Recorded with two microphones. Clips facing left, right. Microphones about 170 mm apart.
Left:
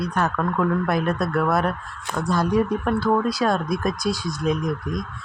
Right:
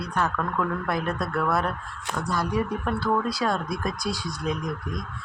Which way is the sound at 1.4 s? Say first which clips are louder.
Left 4 dB; 20° left (ahead or behind).